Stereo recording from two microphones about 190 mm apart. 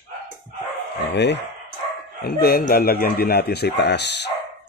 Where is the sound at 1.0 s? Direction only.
65° left (ahead or behind).